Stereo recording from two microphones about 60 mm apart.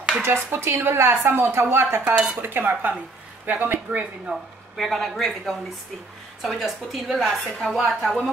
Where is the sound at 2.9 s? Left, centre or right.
Right.